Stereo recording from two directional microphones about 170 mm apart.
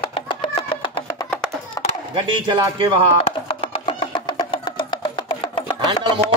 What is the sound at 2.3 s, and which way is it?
Speech, 30° right (ahead or behind).